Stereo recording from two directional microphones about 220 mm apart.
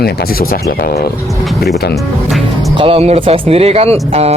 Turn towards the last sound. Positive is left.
turn(degrees=-30)  # may be behind; listen again after turning